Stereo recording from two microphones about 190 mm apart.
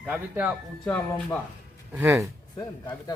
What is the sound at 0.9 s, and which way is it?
Speech, 10° left (ahead or behind).